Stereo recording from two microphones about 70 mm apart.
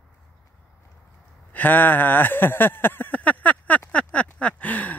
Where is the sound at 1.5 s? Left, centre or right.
Left.